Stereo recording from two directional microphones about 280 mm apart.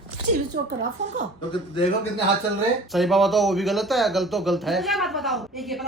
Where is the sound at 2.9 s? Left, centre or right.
Centre.